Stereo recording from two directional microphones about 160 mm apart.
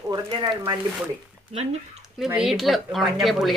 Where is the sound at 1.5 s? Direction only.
40° right (ahead or behind).